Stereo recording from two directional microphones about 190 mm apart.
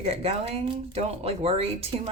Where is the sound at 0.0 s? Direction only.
30° right (ahead or behind).